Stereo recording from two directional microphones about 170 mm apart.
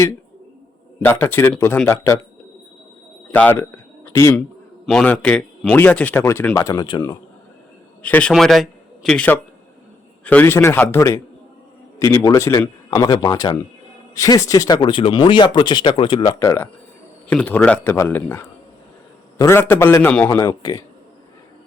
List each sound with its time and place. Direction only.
1.0 s speech: 10° left (ahead or behind)
3.3 s a man's voice: 10° left (ahead or behind)
8.0 s a man's voice: 5° left (ahead or behind)
20.3 s speech: 20° left (ahead or behind)